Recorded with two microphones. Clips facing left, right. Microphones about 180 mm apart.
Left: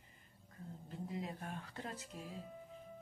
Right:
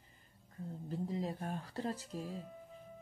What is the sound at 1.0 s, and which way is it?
Speech, 35° right (ahead or behind).